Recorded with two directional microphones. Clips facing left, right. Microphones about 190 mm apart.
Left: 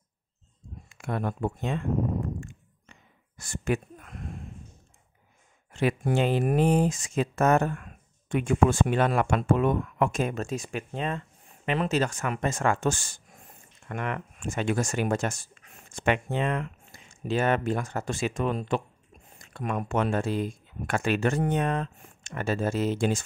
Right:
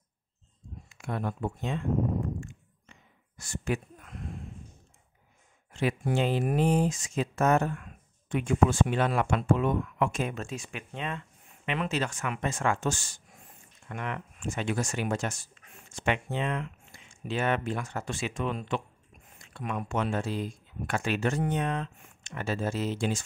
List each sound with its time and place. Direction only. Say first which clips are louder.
0.8 s speech: left 3 dB; 55° left (ahead or behind)
2.9 s a sound: left 1 dB; 55° left (ahead or behind)
5.7 s speech: left 3 dB; 55° left (ahead or behind)